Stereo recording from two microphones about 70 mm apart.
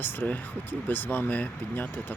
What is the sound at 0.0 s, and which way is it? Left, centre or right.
Speech, left.